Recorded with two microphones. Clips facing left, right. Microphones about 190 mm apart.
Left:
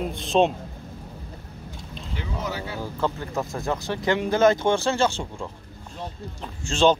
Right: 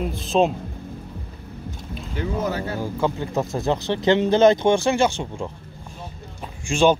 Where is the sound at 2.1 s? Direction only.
45° right (ahead or behind).